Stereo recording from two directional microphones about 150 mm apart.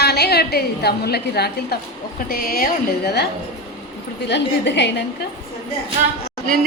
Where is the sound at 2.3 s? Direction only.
75° left (ahead or behind).